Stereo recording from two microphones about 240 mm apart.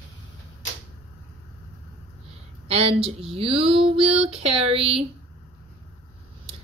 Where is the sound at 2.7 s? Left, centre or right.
Right.